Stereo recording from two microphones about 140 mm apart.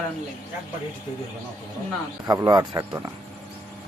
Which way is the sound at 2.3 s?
30° right (ahead or behind).